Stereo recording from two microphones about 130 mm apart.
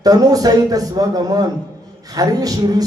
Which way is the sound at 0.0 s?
30° right (ahead or behind).